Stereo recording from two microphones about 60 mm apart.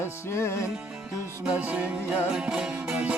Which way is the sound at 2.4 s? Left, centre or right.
Centre.